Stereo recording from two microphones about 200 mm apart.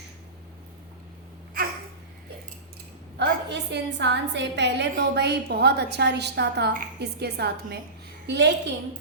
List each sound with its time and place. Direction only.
1.6 s babbling: 45° right (ahead or behind)
3.2 s a woman's voice: 60° right (ahead or behind)